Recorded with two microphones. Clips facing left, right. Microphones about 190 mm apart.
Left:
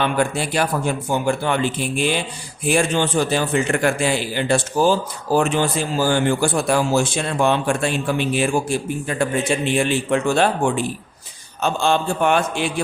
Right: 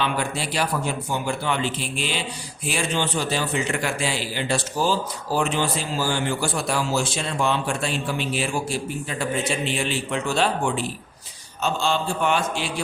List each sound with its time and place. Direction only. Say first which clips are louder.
0.0 s a man's voice: left 5 dB; 50° left (ahead or behind)